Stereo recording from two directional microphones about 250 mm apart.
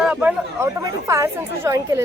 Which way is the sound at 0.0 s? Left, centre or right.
Centre.